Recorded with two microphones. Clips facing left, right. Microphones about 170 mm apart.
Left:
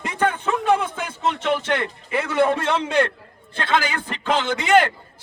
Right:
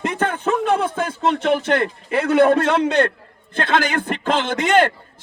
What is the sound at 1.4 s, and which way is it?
A man's voice, 55° right (ahead or behind).